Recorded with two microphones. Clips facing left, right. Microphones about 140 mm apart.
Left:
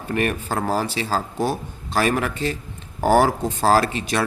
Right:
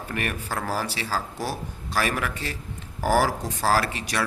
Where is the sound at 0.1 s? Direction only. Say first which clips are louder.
Left 8 dB; 30° left (ahead or behind).